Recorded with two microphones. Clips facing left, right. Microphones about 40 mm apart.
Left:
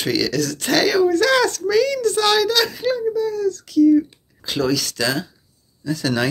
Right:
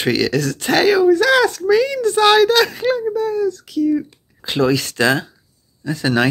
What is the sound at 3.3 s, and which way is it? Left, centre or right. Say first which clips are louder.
Speech: even; centre.